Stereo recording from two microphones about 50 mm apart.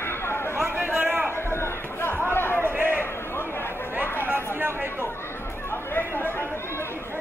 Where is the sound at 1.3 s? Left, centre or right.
Left.